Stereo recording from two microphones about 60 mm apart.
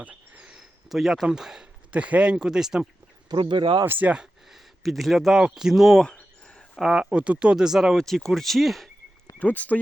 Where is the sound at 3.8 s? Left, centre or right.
Right.